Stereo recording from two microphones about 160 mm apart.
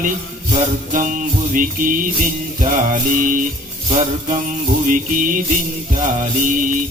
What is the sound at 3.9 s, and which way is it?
Music, 45° right (ahead or behind).